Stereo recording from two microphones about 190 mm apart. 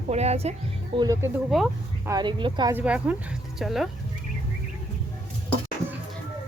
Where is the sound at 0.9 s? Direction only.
15° right (ahead or behind).